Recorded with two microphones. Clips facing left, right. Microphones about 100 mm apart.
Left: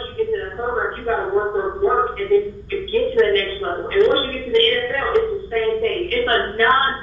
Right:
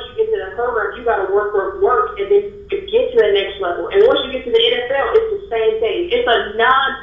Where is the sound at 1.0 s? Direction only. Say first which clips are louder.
Right 6 dB; 60° right (ahead or behind).